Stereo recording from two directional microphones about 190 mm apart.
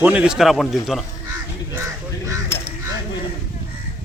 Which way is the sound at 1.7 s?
15° right (ahead or behind).